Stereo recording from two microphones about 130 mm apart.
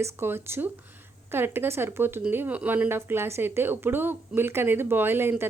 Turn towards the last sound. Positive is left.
turn(degrees=-15)  # may be behind; listen again after turning